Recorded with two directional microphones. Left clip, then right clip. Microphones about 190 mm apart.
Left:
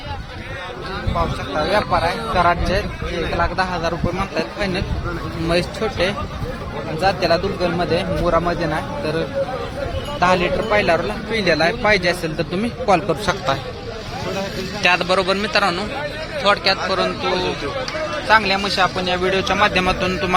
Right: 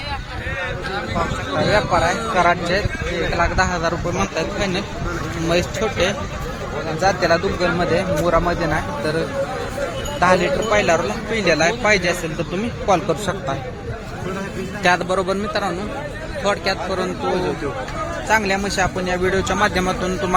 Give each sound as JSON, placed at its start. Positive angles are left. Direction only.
{"t": 1.7, "sound": "a man's voice", "side_deg": -10}
{"t": 4.2, "sound": "a man's voice", "side_deg": 0}
{"t": 14.8, "sound": "a man's voice", "side_deg": -15}
{"t": 15.4, "sound": "a man's voice", "side_deg": 0}
{"t": 18.3, "sound": "a man's voice", "side_deg": -20}